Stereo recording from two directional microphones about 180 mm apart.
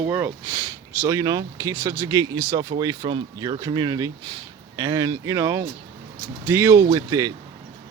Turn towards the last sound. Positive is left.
turn(degrees=-20)  # may be behind; listen again after turning